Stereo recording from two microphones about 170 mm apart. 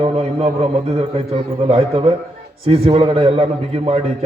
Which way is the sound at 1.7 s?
35° right (ahead or behind).